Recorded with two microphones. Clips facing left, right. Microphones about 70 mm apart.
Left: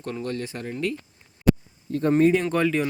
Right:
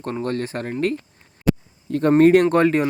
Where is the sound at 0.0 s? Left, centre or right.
Right.